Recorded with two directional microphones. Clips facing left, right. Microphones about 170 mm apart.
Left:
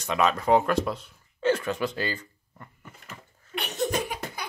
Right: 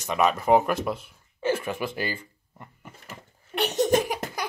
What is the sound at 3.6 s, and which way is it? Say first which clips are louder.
Laughter: right 5 dB; 75° right (ahead or behind).